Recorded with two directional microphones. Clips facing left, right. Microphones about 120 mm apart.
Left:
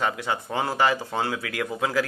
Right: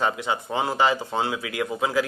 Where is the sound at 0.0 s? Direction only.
20° right (ahead or behind).